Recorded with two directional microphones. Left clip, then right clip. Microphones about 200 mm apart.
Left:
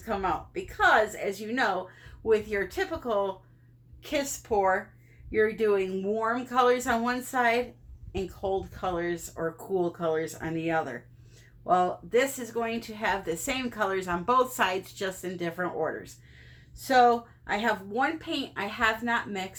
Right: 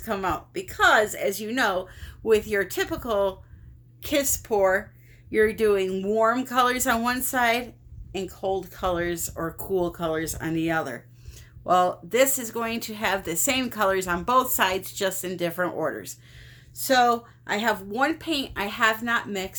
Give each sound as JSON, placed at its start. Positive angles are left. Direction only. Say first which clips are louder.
{"t": 0.0, "sound": "a woman's voice", "louder": "right 2 dB", "side_deg": -50}